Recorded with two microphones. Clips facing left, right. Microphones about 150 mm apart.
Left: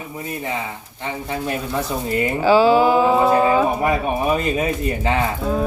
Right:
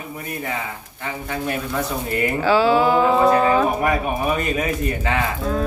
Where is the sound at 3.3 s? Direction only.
25° left (ahead or behind).